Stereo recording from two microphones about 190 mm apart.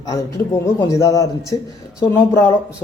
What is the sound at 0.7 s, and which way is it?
A man's voice, 15° left (ahead or behind).